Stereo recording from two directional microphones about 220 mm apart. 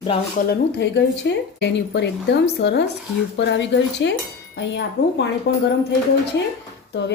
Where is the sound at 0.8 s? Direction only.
50° left (ahead or behind).